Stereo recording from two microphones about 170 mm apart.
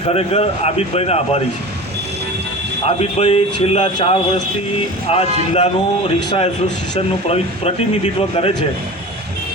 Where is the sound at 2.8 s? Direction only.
35° left (ahead or behind).